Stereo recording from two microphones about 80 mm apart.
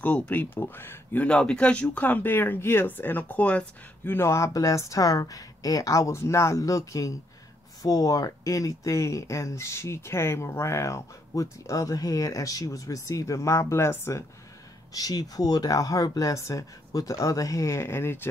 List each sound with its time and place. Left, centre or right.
0.0 s speech: centre
1.2 s speech: centre
4.1 s speech: left
14.9 s speech: left